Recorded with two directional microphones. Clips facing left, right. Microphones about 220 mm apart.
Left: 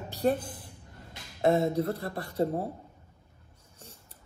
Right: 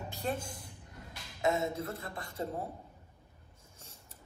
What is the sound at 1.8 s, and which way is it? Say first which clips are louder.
Speech: left 9 dB; 40° left (ahead or behind).